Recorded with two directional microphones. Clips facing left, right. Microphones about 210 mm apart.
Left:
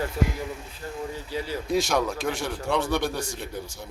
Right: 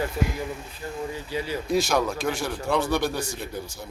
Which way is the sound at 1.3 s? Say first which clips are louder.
Right 1 dB; 15° right (ahead or behind).